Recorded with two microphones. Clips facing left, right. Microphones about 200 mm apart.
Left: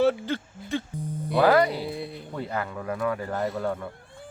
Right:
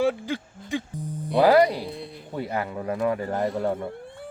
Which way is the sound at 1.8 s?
5° left (ahead or behind).